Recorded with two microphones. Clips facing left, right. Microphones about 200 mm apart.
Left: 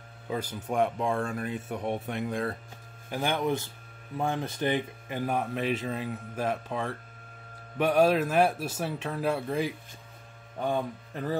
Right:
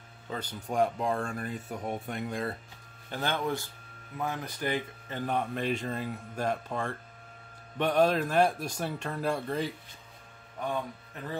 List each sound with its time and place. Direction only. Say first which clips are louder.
0.3 s speech: left 4 dB; 10° left (ahead or behind)
3.1 s speech: left 3 dB; 15° left (ahead or behind)